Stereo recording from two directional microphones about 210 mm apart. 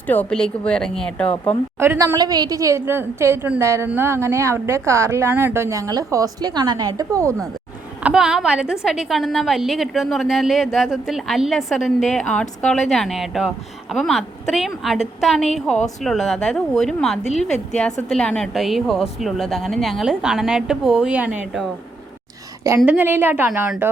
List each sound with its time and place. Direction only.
0.1 s a woman's voice: 5° left (ahead or behind)
1.8 s a woman's voice: 10° right (ahead or behind)
8.0 s a woman's voice: 5° right (ahead or behind)
22.8 s a woman's voice: 10° right (ahead or behind)